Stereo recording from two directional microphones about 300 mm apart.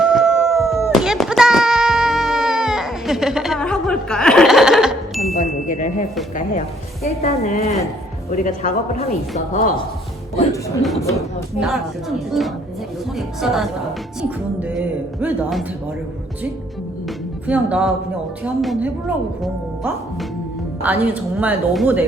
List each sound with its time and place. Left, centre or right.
0.0 s a sound: centre
5.6 s speech: left
10.8 s speech: centre
17.4 s speech: centre
20.8 s speech: centre